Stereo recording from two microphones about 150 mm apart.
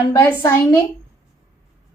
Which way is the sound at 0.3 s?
15° left (ahead or behind).